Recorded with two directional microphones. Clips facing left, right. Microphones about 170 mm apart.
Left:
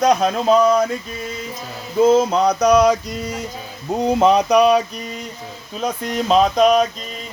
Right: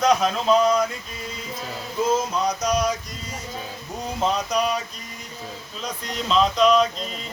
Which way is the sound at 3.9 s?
75° left (ahead or behind).